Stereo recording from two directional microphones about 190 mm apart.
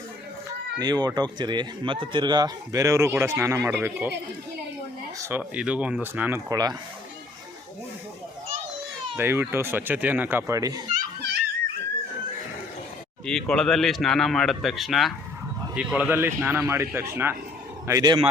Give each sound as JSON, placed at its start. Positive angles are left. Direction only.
{"t": 0.8, "sound": "a man's voice", "side_deg": -20}
{"t": 5.2, "sound": "speech", "side_deg": -10}
{"t": 9.1, "sound": "speech", "side_deg": -10}
{"t": 13.2, "sound": "a man's voice", "side_deg": 5}